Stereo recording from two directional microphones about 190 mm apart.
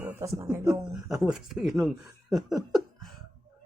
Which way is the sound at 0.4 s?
15° right (ahead or behind).